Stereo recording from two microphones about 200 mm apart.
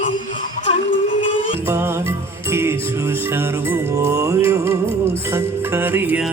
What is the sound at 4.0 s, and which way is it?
Music, 15° right (ahead or behind).